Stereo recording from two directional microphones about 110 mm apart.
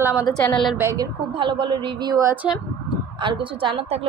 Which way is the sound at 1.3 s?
50° right (ahead or behind).